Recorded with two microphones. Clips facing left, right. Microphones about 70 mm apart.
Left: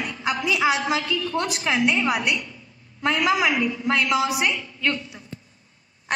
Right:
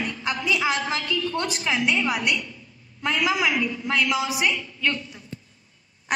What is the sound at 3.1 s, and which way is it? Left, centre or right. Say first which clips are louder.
Speech: left 2 dB; left.